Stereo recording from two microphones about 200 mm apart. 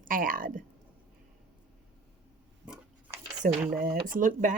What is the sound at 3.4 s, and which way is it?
A woman's voice, 45° right (ahead or behind).